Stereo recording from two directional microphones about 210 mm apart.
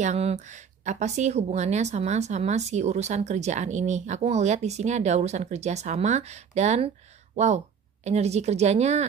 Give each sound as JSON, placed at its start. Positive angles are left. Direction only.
{"t": 0.0, "sound": "speech", "side_deg": -30}